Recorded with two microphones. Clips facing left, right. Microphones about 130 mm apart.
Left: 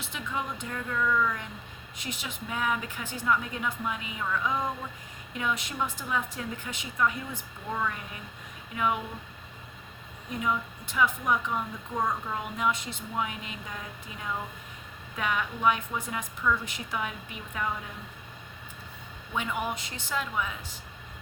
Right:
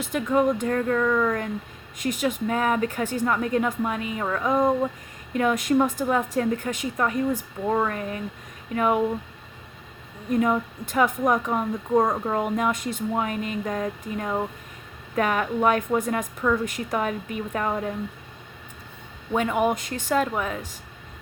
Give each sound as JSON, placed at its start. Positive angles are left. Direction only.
{"t": 0.0, "sound": "a woman's voice", "side_deg": -45}
{"t": 10.2, "sound": "a woman's voice", "side_deg": -45}
{"t": 19.3, "sound": "a woman's voice", "side_deg": -50}